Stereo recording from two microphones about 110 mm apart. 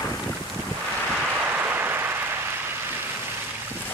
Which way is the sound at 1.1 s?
15° right (ahead or behind).